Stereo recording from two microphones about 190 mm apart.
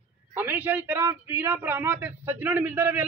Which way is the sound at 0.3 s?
10° right (ahead or behind).